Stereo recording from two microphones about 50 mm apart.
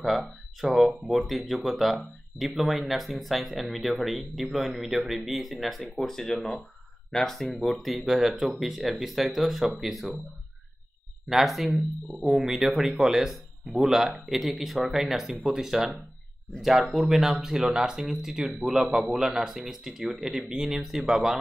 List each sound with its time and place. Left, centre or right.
0.0 s speech: centre
5.9 s speech: centre
11.2 s speech: centre
20.4 s speech: centre